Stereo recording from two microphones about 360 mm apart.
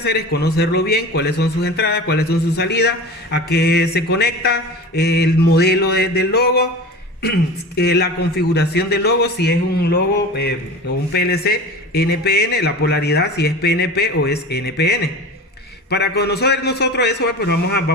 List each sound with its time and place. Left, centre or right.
0.0 s speech: left
7.8 s speech: left